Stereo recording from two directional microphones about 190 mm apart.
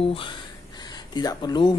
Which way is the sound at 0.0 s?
30° left (ahead or behind).